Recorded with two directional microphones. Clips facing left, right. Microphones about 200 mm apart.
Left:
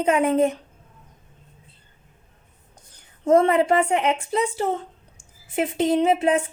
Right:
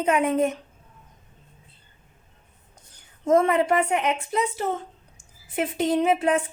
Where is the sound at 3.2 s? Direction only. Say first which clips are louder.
Left 2 dB; 30° left (ahead or behind).